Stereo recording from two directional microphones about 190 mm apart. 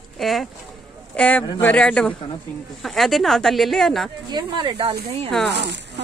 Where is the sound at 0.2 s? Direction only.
Centre (ahead or behind).